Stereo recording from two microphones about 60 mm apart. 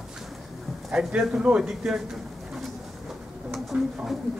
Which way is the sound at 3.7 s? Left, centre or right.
Right.